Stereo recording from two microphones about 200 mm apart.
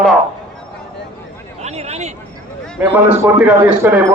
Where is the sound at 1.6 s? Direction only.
35° right (ahead or behind).